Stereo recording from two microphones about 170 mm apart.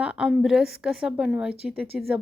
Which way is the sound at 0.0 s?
5° right (ahead or behind).